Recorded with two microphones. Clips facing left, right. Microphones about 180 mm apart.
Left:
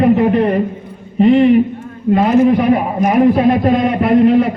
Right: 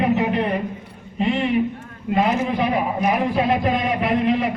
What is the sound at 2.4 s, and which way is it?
A man's voice, 50° left (ahead or behind).